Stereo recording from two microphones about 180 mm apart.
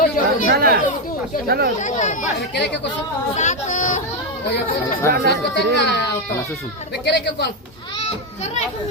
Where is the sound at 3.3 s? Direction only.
40° left (ahead or behind).